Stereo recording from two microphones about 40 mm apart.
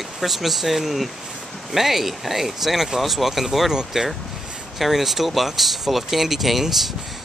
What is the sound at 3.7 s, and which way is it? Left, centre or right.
Speech, centre.